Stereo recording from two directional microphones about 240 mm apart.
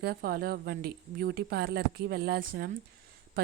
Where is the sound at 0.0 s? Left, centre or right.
Right.